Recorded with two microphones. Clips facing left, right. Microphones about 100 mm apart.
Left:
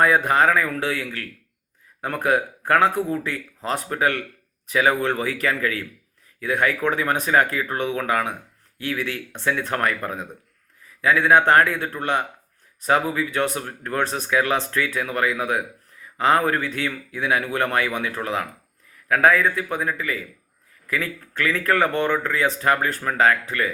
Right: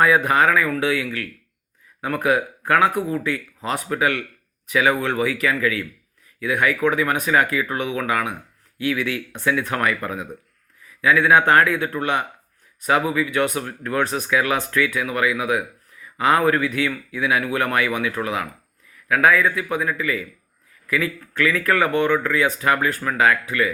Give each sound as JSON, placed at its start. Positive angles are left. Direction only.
{"t": 0.3, "sound": "speech", "side_deg": 30}